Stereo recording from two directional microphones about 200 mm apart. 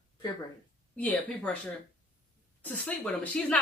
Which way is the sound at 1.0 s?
5° left (ahead or behind).